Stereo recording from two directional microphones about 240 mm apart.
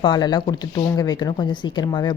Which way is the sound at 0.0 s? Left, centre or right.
Centre.